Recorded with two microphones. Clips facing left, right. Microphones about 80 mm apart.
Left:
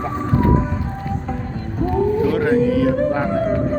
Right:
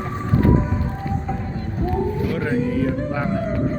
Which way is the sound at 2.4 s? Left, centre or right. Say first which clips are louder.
Left 3 dB; left.